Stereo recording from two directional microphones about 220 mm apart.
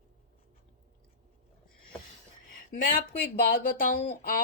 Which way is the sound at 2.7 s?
40° left (ahead or behind).